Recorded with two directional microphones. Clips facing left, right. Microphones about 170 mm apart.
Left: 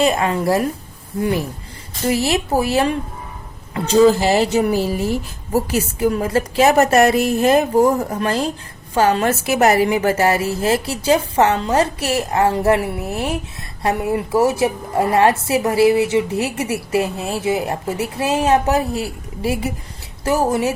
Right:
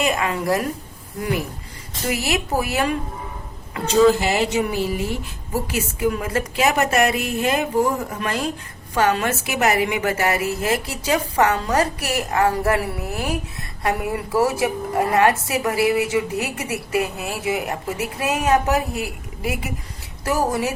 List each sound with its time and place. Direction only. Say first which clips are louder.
0.0 s a woman's voice: left 5 dB; 30° left (ahead or behind)
2.0 s a woman's voice: left 5 dB; 30° left (ahead or behind)